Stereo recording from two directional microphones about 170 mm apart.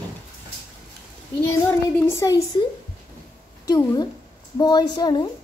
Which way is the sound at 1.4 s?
15° left (ahead or behind).